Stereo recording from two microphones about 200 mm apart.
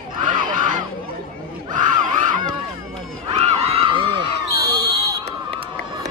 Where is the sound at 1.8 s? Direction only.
40° right (ahead or behind).